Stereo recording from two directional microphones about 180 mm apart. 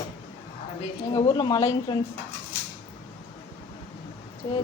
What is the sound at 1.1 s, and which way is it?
Speech, 25° left (ahead or behind).